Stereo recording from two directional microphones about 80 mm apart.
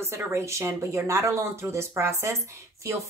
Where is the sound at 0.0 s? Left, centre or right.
Right.